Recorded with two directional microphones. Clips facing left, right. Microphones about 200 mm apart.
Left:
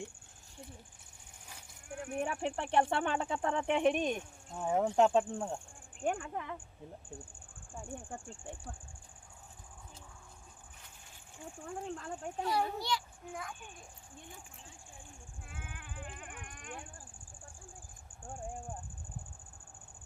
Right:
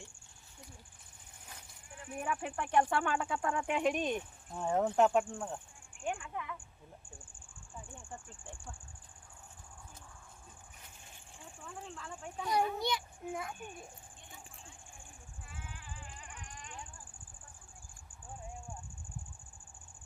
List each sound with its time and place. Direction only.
1.9 s a sound: 65° left (ahead or behind)
2.4 s speech: 30° left (ahead or behind)
4.4 s speech: centre (ahead or behind)
5.1 s speech: 25° left (ahead or behind)
6.1 s speech: 40° left (ahead or behind)
7.7 s speech: 50° left (ahead or behind)
11.6 s speech: 45° left (ahead or behind)
12.5 s a child's voice: 20° right (ahead or behind)
15.4 s a sound: 55° left (ahead or behind)
18.3 s a sound: 50° left (ahead or behind)